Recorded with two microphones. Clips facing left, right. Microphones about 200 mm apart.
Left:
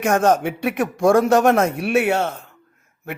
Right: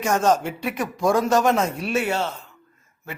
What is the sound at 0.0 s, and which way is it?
Speech, 60° left (ahead or behind).